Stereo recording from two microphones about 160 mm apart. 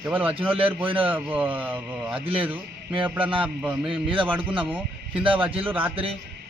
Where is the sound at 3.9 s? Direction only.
30° right (ahead or behind).